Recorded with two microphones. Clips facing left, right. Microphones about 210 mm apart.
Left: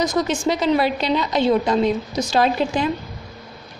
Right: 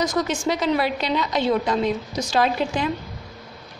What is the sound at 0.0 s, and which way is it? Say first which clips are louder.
A woman's voice: left 3 dB; 25° left (ahead or behind).